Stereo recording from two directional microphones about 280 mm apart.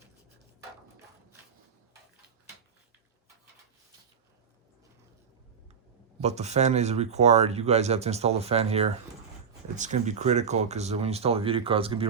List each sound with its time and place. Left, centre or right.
6.1 s speech: right